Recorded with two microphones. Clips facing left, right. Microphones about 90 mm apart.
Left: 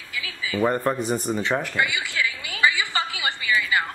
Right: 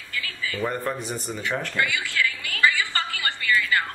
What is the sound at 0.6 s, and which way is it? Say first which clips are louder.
Speech: left 6 dB; 45° left (ahead or behind).